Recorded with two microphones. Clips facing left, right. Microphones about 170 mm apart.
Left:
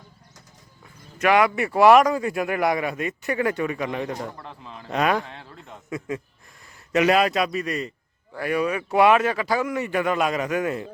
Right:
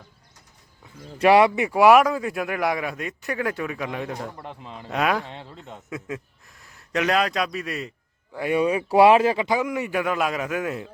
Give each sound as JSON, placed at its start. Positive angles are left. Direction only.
{"t": 1.2, "sound": "speech", "side_deg": -30}
{"t": 1.5, "sound": "a man's voice", "side_deg": -15}
{"t": 4.4, "sound": "a man's voice", "side_deg": -15}
{"t": 4.9, "sound": "a man's voice", "side_deg": 0}
{"t": 5.2, "sound": "speech", "side_deg": -20}
{"t": 5.9, "sound": "a man's voice", "side_deg": 0}
{"t": 8.4, "sound": "a man's voice", "side_deg": -20}